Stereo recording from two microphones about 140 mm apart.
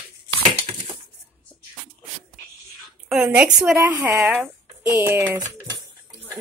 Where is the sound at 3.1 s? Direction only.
10° right (ahead or behind).